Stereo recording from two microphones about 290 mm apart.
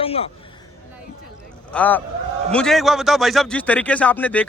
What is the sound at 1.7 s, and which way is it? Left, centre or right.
Speech, centre.